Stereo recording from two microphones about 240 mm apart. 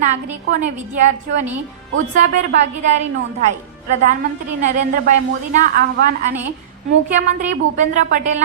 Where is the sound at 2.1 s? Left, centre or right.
Right.